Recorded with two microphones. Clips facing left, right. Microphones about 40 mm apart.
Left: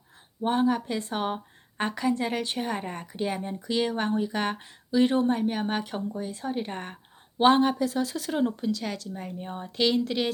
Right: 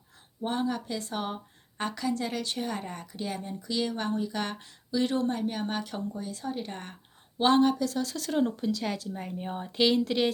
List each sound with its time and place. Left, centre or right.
0.4 s a woman's voice: left; by 10.3 s centre